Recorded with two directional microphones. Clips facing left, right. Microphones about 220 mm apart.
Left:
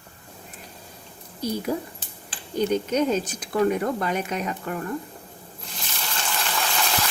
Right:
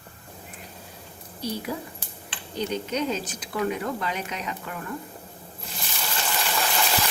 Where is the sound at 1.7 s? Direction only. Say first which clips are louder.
Left 5 dB; 50° left (ahead or behind).